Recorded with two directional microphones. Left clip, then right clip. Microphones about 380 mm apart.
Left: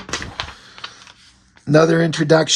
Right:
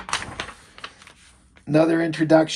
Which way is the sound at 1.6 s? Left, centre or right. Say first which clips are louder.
Left 5 dB; left.